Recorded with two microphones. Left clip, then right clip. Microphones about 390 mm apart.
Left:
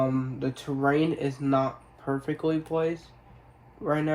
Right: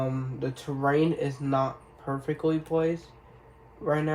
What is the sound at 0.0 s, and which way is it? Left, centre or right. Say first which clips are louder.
Speech: left 4 dB; centre.